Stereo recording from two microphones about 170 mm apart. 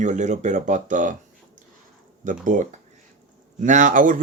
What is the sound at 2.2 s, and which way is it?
Speech, 50° right (ahead or behind).